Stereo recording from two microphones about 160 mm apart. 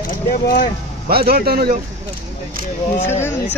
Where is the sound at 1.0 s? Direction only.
75° right (ahead or behind).